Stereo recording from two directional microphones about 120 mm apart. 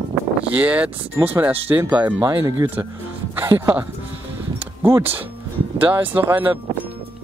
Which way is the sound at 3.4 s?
20° right (ahead or behind).